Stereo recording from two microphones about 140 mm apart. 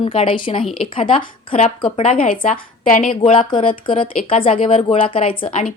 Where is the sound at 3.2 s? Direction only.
40° left (ahead or behind).